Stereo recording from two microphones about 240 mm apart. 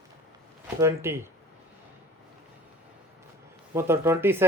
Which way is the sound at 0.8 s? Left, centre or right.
Centre.